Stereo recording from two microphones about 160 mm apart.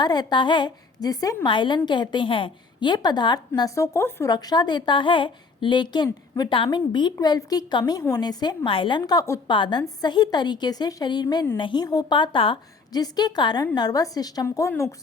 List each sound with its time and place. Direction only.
0.0 s a woman's voice: 25° left (ahead or behind)